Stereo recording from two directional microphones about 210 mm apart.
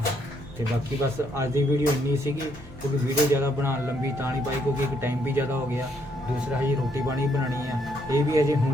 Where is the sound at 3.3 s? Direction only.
10° right (ahead or behind).